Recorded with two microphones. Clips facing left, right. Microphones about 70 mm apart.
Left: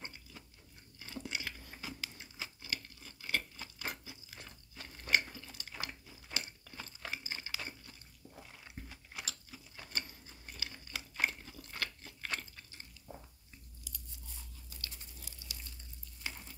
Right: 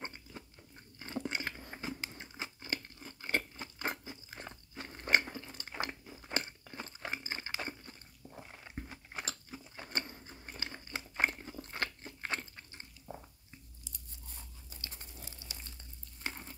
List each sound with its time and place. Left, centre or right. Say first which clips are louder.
0.0 s a sound: right 5 dB; right
8.2 s biting: right 3 dB; right
13.0 s biting: right 5 dB; right
14.7 s dog: even; right
15.0 s a sound: right 3 dB; right
16.2 s frying: right 3 dB; right